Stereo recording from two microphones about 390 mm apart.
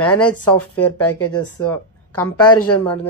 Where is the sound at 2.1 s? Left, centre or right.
Left.